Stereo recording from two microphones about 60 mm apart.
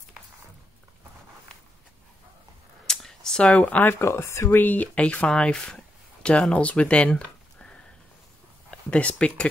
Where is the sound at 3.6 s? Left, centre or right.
Left.